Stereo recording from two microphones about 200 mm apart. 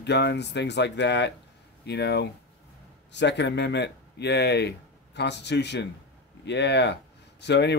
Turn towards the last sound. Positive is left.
turn(degrees=60)  # may be behind; listen again after turning